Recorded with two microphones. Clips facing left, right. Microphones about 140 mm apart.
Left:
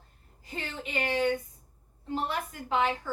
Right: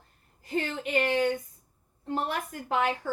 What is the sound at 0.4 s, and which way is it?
A woman's voice, 50° right (ahead or behind).